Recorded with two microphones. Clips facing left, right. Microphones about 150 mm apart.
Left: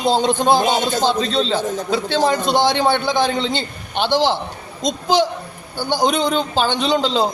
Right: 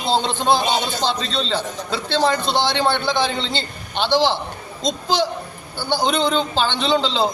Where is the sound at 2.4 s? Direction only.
45° left (ahead or behind).